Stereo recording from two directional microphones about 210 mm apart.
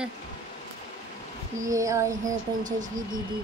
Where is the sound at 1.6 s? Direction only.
15° right (ahead or behind).